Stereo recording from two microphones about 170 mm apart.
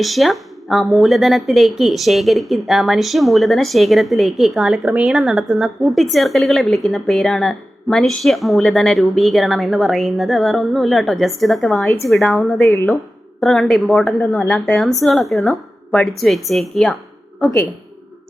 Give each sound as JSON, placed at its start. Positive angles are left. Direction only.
{"t": 0.0, "sound": "speech", "side_deg": 0}
{"t": 11.8, "sound": "speech", "side_deg": 15}
{"t": 12.0, "sound": "speech", "side_deg": 0}
{"t": 12.6, "sound": "speech", "side_deg": 15}
{"t": 13.4, "sound": "speech", "side_deg": 0}